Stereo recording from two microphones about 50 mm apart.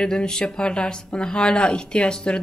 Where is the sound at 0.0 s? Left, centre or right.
Centre.